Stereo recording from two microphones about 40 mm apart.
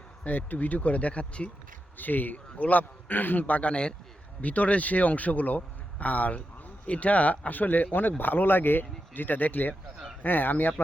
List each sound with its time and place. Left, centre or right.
0.3 s a man's voice: left
2.0 s a man's voice: left
3.1 s a man's voice: left
3.4 s a man's voice: left
4.4 s a man's voice: left